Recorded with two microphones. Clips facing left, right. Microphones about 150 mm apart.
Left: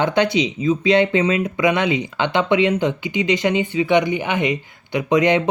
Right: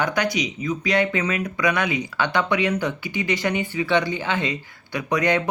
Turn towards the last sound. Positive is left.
turn(degrees=20)  # may be behind; listen again after turning